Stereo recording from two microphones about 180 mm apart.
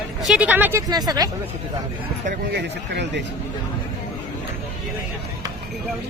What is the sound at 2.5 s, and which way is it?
Speech, 75° right (ahead or behind).